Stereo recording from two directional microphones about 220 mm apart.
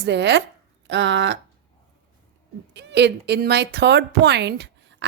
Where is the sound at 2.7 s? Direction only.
50° right (ahead or behind).